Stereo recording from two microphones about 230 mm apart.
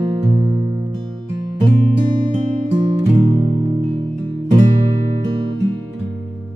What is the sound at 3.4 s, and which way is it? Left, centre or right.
Music, right.